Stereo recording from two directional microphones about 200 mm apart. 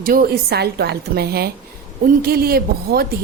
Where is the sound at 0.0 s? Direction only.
45° right (ahead or behind).